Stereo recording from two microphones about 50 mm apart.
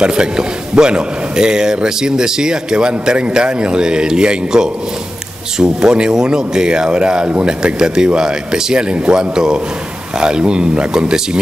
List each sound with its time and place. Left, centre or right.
0.0 s a man's voice: centre